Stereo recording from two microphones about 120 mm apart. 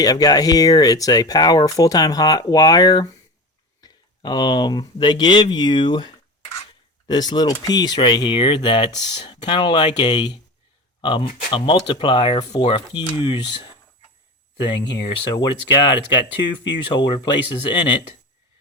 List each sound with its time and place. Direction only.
0.0 s speech: 30° left (ahead or behind)
14.6 s speech: 35° left (ahead or behind)